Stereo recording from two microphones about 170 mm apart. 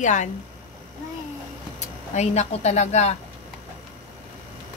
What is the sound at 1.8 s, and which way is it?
Speech, 40° left (ahead or behind).